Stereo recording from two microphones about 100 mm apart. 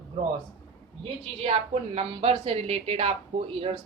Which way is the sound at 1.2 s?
90° right.